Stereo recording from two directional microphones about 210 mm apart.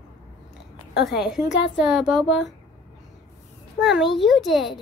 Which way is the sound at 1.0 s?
Centre (ahead or behind).